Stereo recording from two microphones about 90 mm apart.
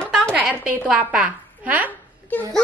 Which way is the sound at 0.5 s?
15° right (ahead or behind).